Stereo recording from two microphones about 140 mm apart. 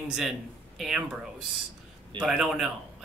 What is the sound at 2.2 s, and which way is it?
Speech, 5° right (ahead or behind).